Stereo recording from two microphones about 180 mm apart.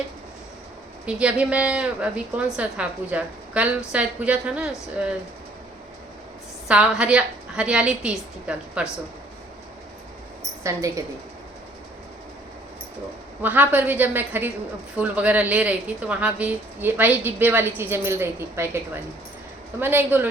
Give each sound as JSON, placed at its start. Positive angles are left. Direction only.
{"t": 1.0, "sound": "a woman's voice", "side_deg": -5}
{"t": 6.7, "sound": "a woman's voice", "side_deg": -5}
{"t": 10.6, "sound": "a woman's voice", "side_deg": -15}
{"t": 13.4, "sound": "a woman's voice", "side_deg": -10}
{"t": 19.8, "sound": "a woman's voice", "side_deg": -10}